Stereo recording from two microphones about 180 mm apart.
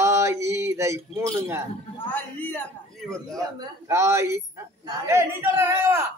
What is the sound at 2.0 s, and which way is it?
A man's voice, 10° left (ahead or behind).